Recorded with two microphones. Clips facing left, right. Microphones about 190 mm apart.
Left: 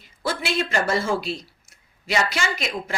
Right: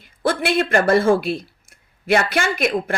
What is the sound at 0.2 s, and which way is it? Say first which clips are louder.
A woman's voice: right 6 dB; 55° right (ahead or behind).